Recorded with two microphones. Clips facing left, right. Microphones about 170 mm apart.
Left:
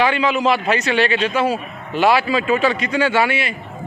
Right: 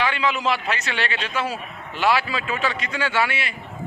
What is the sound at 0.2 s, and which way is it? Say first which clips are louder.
Speech: left 6 dB; 15° left (ahead or behind).